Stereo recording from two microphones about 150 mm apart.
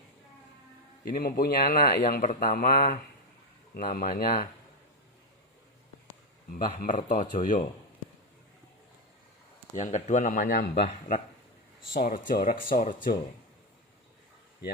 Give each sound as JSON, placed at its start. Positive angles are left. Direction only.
{"t": 1.1, "sound": "a man's voice", "side_deg": 90}
{"t": 6.8, "sound": "speech", "side_deg": 60}
{"t": 9.7, "sound": "speech", "side_deg": 55}
{"t": 11.9, "sound": "speech", "side_deg": 75}
{"t": 12.3, "sound": "speech", "side_deg": 65}